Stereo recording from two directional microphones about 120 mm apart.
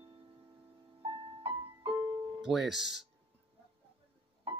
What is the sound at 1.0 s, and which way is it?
Music, 50° right (ahead or behind).